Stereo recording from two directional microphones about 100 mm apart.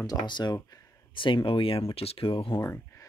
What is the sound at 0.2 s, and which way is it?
Speech, 50° left (ahead or behind).